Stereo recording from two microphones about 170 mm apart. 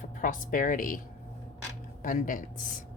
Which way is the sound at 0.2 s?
55° left (ahead or behind).